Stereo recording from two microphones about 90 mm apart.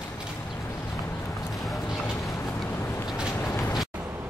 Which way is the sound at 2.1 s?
35° left (ahead or behind).